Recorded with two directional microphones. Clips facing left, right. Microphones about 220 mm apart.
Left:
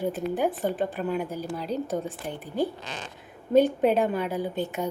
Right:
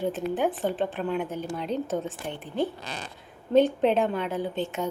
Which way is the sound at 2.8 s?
35° right (ahead or behind).